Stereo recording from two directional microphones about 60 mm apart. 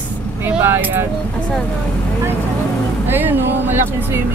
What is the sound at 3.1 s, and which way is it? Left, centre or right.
Speech, right.